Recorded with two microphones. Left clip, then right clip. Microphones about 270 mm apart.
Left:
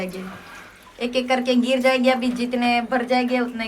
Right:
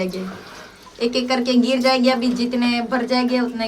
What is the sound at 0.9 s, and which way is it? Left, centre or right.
Speech, centre.